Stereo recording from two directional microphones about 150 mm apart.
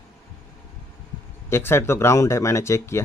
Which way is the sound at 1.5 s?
15° left (ahead or behind).